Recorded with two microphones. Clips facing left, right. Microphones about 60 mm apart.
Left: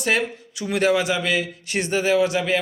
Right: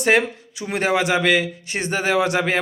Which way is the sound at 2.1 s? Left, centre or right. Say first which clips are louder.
Right 1 dB; right.